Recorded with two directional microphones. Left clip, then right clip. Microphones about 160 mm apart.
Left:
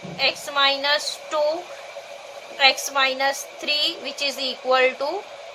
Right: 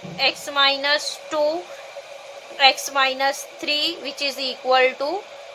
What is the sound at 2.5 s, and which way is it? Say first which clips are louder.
A woman's voice: right 1 dB; 30° right (ahead or behind).